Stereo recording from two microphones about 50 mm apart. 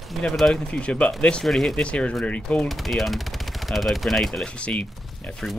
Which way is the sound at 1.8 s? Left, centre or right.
Left.